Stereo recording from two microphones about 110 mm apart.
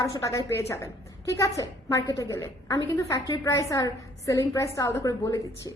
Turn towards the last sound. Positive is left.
turn(degrees=30)  # may be behind; listen again after turning